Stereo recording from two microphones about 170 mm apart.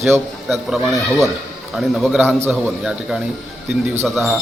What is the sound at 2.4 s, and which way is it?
Speech, 10° right (ahead or behind).